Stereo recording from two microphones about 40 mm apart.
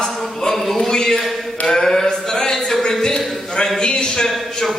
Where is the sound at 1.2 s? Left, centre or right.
Centre.